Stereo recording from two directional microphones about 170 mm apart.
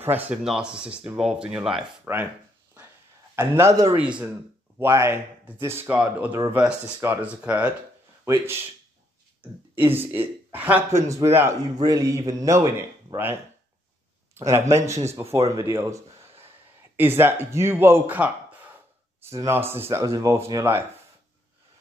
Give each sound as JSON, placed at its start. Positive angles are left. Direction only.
{"t": 0.0, "sound": "speech", "side_deg": -10}
{"t": 3.3, "sound": "speech", "side_deg": -15}
{"t": 9.4, "sound": "a man's voice", "side_deg": -10}
{"t": 14.3, "sound": "a sound", "side_deg": -15}
{"t": 14.7, "sound": "speech", "side_deg": -15}
{"t": 15.2, "sound": "speech", "side_deg": -35}
{"t": 15.7, "sound": "speech", "side_deg": -15}